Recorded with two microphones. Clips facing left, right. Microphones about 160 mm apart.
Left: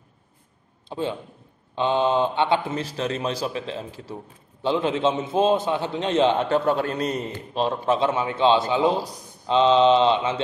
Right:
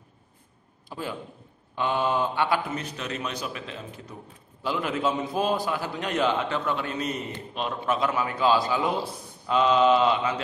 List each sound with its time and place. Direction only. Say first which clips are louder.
0.8 s a man's voice: left 6 dB; 25° left (ahead or behind)
6.5 s a man's voice: left 7 dB; 40° left (ahead or behind)